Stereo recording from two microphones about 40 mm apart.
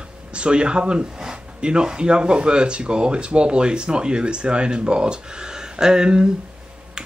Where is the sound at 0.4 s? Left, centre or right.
Right.